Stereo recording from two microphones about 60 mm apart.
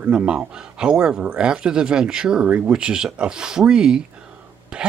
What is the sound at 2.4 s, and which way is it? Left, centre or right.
Speech, right.